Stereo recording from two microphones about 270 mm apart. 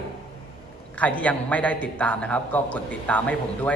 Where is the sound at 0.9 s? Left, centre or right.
Centre.